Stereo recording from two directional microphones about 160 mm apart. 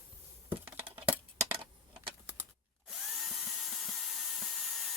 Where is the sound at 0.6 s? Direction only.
35° right (ahead or behind).